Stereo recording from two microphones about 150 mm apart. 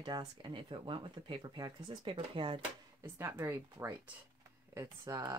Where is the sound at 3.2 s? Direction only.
15° right (ahead or behind).